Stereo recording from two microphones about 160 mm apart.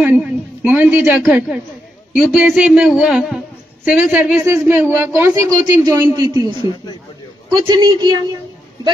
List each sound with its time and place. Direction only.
0.0 s a man's voice: 10° right (ahead or behind); by 8.2 s 25° right (ahead or behind)